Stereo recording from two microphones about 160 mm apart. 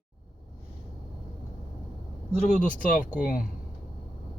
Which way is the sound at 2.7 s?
55° left (ahead or behind).